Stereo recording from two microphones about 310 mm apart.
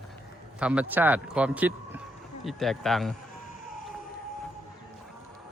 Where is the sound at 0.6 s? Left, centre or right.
Centre.